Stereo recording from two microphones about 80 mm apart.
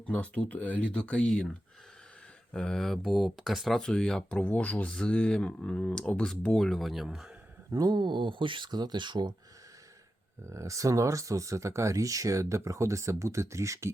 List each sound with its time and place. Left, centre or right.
0.0 s speech: centre
2.5 s speech: centre
7.7 s speech: right
10.4 s speech: right